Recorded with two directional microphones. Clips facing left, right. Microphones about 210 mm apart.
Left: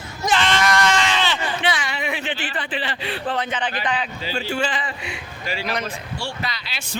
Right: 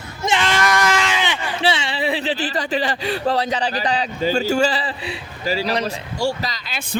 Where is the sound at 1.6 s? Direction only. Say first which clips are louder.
Right 8 dB; 30° right (ahead or behind).